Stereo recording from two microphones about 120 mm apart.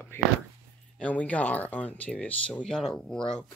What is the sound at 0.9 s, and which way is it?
Speech, 10° left (ahead or behind).